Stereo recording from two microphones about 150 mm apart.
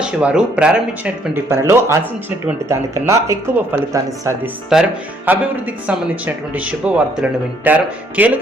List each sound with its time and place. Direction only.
0.0 s speech: 5° right (ahead or behind)
1.5 s speech: 20° right (ahead or behind)
4.7 s speech: 10° right (ahead or behind)